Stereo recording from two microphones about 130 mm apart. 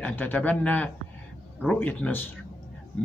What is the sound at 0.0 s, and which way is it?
Speech, 15° left (ahead or behind).